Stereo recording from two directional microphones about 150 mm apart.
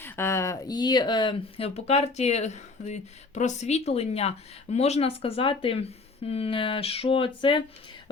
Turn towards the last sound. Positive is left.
turn(degrees=35)  # may be behind; listen again after turning